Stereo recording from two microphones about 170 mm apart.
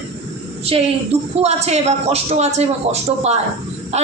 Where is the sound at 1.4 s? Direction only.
40° right (ahead or behind).